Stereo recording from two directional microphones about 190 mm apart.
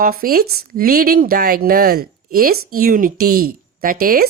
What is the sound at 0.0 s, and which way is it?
Speech, 50° right (ahead or behind).